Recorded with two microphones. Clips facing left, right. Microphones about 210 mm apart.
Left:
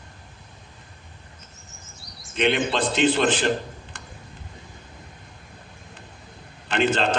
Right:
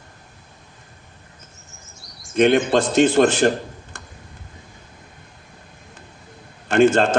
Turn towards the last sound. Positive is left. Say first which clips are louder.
# right 7 dB
turn(degrees=-45)  # may be behind; listen again after turning